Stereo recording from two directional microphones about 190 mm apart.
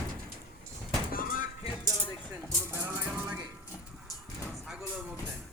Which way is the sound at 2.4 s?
10° right (ahead or behind).